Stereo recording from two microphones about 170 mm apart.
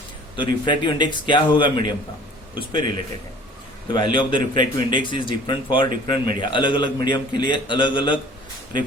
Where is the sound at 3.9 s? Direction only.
30° left (ahead or behind).